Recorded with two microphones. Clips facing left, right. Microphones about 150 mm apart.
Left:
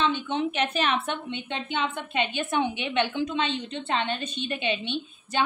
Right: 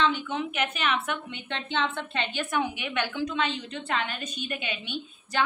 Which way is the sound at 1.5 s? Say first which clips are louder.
Right 1 dB; 15° left (ahead or behind).